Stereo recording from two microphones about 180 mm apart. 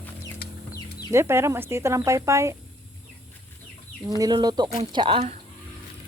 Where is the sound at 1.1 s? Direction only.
15° right (ahead or behind).